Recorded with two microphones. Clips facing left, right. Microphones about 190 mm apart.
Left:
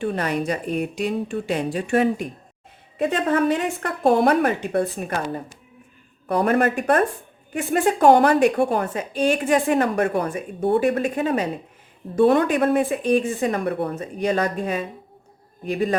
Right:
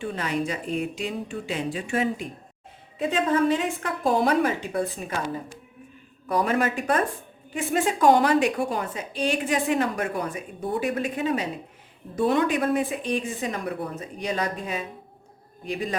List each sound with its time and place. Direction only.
0.0 s a woman's voice: 55° left (ahead or behind)